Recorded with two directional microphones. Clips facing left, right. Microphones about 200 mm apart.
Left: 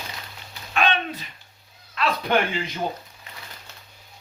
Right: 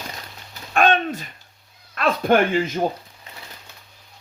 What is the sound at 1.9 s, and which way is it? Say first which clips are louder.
Speech: right 5 dB; 50° right (ahead or behind).